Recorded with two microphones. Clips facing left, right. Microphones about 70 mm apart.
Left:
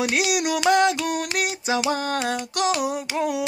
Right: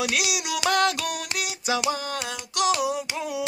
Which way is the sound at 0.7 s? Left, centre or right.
Left.